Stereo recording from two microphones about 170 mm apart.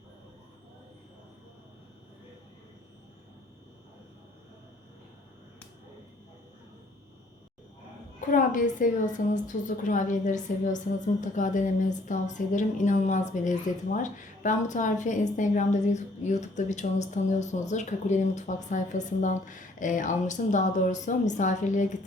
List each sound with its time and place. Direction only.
8.3 s a woman's voice: 50° left (ahead or behind)